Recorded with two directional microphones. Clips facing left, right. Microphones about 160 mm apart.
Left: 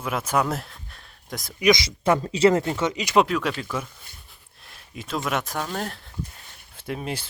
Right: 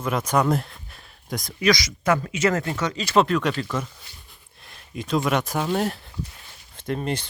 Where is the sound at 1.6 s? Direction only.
25° left (ahead or behind).